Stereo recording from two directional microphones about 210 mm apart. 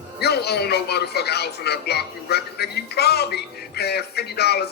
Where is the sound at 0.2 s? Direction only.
50° left (ahead or behind).